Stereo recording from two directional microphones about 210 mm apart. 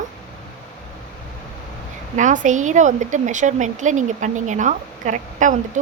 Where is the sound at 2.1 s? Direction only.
35° right (ahead or behind).